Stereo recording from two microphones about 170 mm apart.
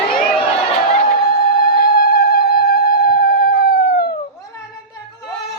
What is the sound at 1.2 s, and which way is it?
Music, 65° left (ahead or behind).